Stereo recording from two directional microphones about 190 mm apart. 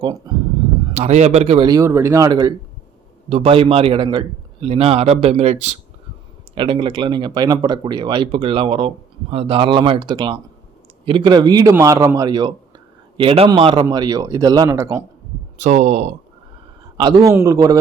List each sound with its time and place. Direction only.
0.0 s speech: 20° right (ahead or behind)
0.9 s speech: 35° right (ahead or behind); by 2.6 s 20° right (ahead or behind)
3.2 s speech: 30° right (ahead or behind)
15.5 s speech: 40° right (ahead or behind)
17.0 s speech: 25° right (ahead or behind)